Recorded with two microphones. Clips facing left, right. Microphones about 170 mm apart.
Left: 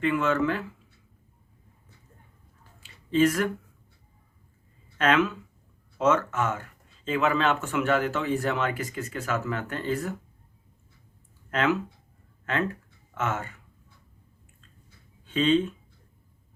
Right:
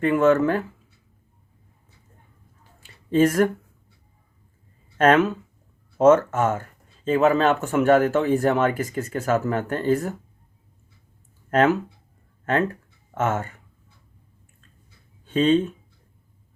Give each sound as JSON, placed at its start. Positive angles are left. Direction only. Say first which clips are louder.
{"t": 0.0, "sound": "speech", "louder": "right 7 dB", "side_deg": -45}
{"t": 2.8, "sound": "a sound", "louder": "right 3 dB", "side_deg": -45}
{"t": 4.9, "sound": "speech", "louder": "right 6 dB", "side_deg": -45}
{"t": 11.5, "sound": "speech", "louder": "right 6 dB", "side_deg": -45}
{"t": 13.1, "sound": "speech", "louder": "right 6 dB", "side_deg": -45}
{"t": 15.3, "sound": "speech", "louder": "right 4 dB", "side_deg": -45}